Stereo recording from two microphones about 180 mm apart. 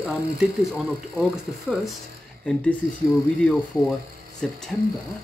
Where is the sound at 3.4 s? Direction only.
5° left (ahead or behind).